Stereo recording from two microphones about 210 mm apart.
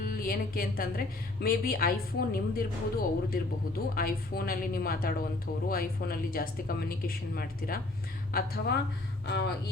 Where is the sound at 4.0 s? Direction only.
45° left (ahead or behind).